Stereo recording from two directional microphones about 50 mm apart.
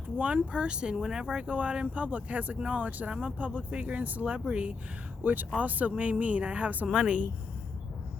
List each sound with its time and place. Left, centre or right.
0.2 s speech: right
5.2 s speech: right
6.8 s speech: centre